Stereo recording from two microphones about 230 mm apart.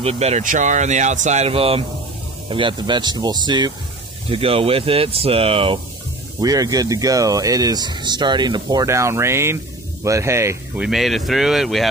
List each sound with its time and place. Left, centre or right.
0.0 s speech: right; by 10.9 s centre
10.9 s speech: centre